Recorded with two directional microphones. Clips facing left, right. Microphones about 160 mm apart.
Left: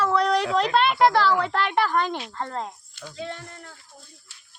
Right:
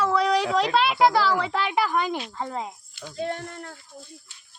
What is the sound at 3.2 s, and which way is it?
Speech, 50° right (ahead or behind).